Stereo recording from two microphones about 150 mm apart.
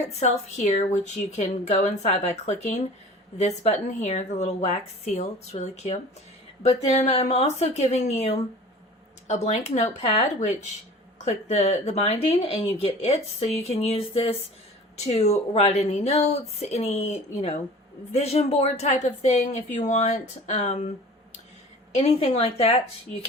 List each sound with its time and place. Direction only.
0.0 s speech: 50° left (ahead or behind)
21.9 s speech: 45° left (ahead or behind)